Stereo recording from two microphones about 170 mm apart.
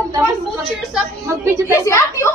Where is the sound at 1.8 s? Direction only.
15° left (ahead or behind).